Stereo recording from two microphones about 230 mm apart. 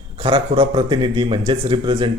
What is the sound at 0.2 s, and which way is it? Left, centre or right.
A man's voice, right.